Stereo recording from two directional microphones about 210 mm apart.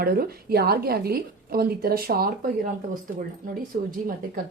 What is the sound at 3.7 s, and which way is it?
Speech, 40° right (ahead or behind).